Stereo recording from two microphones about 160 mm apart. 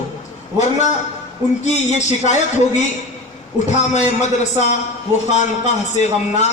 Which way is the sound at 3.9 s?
45° left (ahead or behind).